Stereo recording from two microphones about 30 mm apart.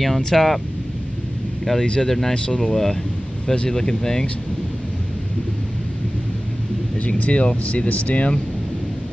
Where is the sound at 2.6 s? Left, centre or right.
Centre.